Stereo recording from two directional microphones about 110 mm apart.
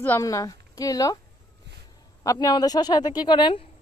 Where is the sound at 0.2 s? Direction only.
30° left (ahead or behind).